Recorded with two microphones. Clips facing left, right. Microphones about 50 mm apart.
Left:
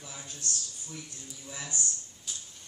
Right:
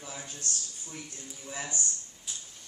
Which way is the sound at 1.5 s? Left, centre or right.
Right.